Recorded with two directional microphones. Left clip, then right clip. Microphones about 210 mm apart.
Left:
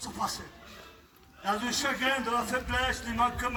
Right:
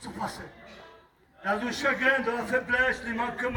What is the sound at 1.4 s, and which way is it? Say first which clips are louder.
Speech: right 2 dB; 10° left (ahead or behind).